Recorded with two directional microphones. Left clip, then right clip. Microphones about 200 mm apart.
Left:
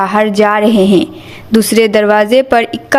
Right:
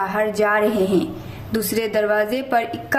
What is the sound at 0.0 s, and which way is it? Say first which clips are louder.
A woman's voice: left 9 dB; 40° left (ahead or behind).